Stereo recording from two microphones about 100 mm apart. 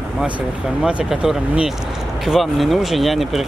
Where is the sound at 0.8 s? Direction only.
10° right (ahead or behind).